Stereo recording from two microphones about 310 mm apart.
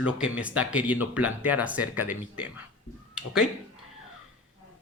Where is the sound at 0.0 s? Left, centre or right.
Centre.